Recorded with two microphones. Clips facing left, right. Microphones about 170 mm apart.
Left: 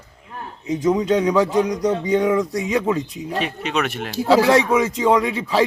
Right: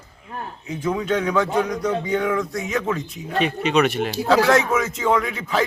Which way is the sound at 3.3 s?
Centre (ahead or behind).